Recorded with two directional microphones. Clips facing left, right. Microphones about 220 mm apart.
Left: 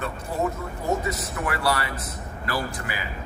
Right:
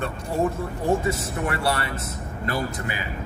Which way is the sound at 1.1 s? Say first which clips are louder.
Right 3 dB; 25° right (ahead or behind).